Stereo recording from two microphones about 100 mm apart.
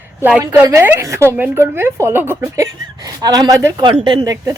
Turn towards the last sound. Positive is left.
turn(degrees=-55)  # may be behind; listen again after turning